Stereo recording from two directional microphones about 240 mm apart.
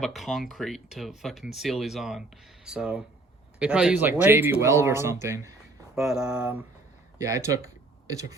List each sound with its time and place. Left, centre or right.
0.0 s speech: centre